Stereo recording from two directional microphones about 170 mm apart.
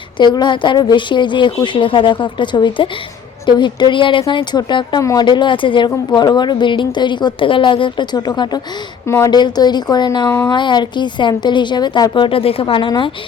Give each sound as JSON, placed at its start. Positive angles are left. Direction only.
{"t": 0.2, "sound": "a woman's voice", "side_deg": 25}